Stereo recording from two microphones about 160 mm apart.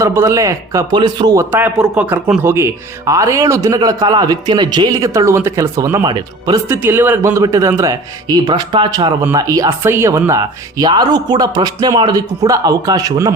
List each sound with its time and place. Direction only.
0.0 s a man's voice: 15° right (ahead or behind)
1.5 s a man's voice: 10° right (ahead or behind)